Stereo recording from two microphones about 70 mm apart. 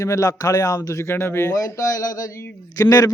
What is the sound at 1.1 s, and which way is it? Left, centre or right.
Speech, left.